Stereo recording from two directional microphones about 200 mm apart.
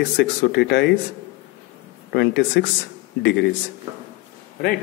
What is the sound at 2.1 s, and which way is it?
Speech, 55° left (ahead or behind).